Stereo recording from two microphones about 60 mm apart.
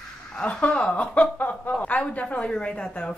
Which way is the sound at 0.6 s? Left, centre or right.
Centre.